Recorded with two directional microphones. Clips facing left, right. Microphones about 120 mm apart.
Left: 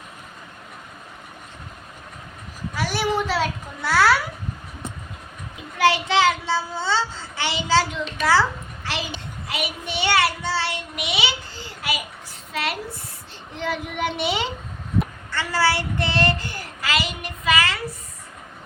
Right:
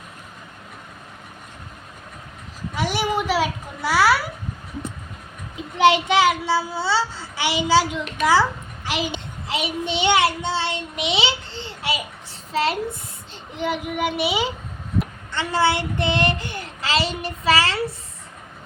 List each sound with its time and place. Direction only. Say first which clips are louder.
2.7 s a sound: right 1 dB; 20° right (ahead or behind)
5.7 s a child's voice: right 3 dB; 20° right (ahead or behind)
12.5 s child singing: right 6 dB; 25° right (ahead or behind)
13.6 s a child's voice: right 2 dB; 15° right (ahead or behind)
15.3 s child singing: right 2 dB; 20° right (ahead or behind)